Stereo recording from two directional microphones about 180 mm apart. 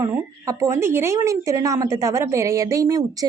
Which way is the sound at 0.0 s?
15° right (ahead or behind).